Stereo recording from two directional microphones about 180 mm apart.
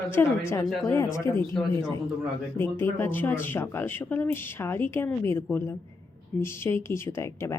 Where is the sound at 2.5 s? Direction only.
15° left (ahead or behind).